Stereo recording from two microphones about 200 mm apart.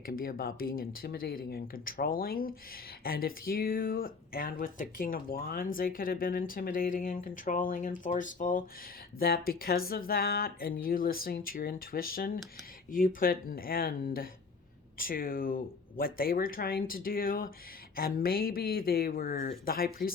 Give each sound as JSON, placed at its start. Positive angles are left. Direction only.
{"t": 0.0, "sound": "speech", "side_deg": 45}